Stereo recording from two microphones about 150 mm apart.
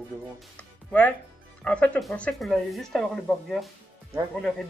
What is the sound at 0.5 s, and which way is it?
Speech, 10° left (ahead or behind).